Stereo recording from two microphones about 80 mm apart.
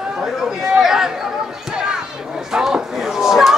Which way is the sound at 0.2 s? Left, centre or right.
Centre.